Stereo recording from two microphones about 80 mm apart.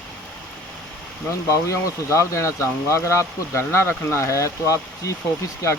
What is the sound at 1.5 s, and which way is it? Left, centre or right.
Speech, left.